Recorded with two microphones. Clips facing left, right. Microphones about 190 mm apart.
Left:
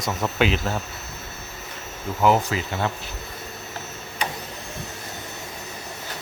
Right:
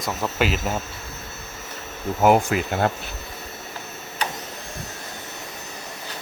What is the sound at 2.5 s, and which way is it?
Speech, 50° right (ahead or behind).